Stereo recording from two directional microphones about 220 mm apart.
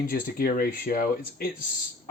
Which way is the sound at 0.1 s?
40° left (ahead or behind).